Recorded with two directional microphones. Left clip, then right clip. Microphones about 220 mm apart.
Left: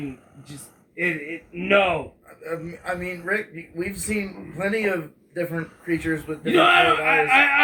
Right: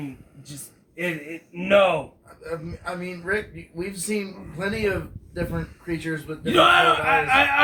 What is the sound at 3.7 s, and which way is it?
Speech, 5° left (ahead or behind).